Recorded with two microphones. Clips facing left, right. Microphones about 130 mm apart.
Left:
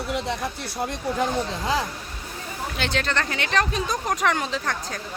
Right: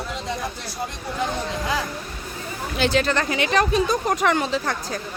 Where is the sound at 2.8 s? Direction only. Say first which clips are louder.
Right 6 dB; 5° right (ahead or behind).